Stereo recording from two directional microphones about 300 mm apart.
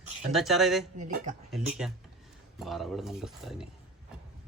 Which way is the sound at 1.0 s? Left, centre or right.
Right.